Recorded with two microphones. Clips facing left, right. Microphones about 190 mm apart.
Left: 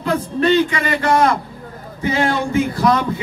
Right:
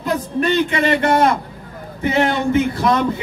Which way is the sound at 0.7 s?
25° right (ahead or behind).